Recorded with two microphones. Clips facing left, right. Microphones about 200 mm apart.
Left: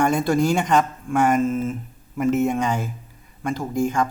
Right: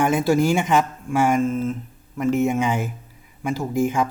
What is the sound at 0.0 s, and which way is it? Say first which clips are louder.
Speech: right 1 dB; 5° right (ahead or behind).